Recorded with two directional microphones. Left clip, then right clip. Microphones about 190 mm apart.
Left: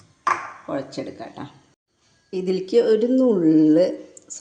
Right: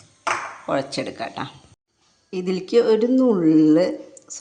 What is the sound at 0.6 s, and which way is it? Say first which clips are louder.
Speech: right 5 dB; 20° right (ahead or behind).